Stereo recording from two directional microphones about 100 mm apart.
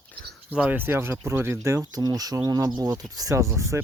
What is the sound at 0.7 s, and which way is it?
Speech, 20° right (ahead or behind).